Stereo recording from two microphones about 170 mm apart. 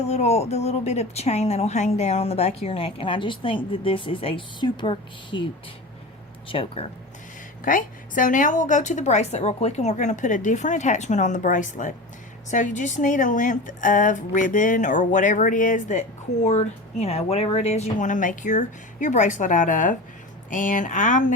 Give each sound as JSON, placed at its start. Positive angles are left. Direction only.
{"t": 0.0, "sound": "speech", "side_deg": 40}
{"t": 6.5, "sound": "speech", "side_deg": 30}
{"t": 7.6, "sound": "a woman's voice", "side_deg": 50}